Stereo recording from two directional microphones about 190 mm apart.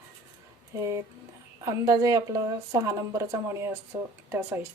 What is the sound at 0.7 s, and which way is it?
Speech, 15° right (ahead or behind).